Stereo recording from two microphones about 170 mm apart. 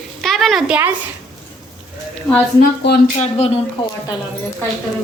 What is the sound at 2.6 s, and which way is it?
Speech, 70° left (ahead or behind).